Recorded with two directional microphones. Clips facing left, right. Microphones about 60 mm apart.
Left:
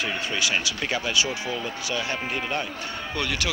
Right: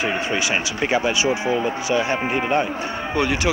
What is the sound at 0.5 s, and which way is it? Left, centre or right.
Speech, right.